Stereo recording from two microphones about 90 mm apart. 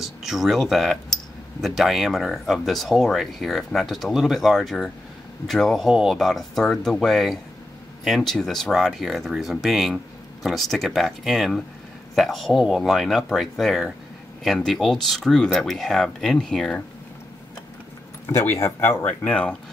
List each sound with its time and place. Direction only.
0.0 s speech: 5° right (ahead or behind)
18.3 s speech: 30° left (ahead or behind)
19.0 s speech: 15° left (ahead or behind)